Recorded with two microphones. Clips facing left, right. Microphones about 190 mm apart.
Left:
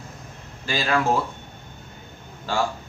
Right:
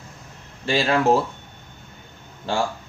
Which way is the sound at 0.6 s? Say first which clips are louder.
Right 4 dB; 30° right (ahead or behind).